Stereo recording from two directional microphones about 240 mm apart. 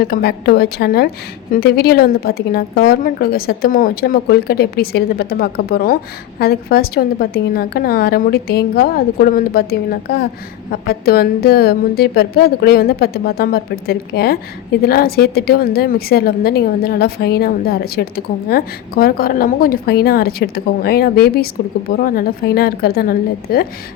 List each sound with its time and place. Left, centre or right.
0.0 s a woman's voice: left